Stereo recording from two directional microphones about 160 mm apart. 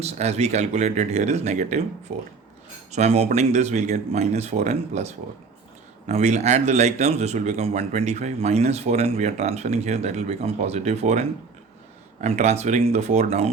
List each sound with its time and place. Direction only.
0.0 s speech: 40° right (ahead or behind)
2.9 s speech: 45° right (ahead or behind)